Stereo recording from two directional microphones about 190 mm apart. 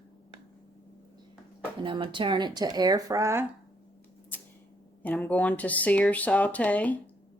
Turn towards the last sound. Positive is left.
turn(degrees=5)  # may be behind; listen again after turning